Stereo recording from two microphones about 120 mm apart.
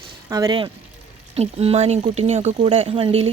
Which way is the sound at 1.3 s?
55° right (ahead or behind).